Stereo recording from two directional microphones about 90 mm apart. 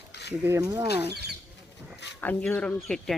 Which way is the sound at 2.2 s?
20° left (ahead or behind).